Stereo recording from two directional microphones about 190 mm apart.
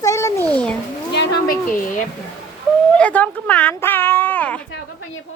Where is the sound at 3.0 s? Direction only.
5° left (ahead or behind).